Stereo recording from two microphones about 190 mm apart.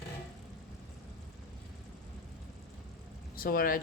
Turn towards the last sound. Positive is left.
turn(degrees=50)  # may be behind; listen again after turning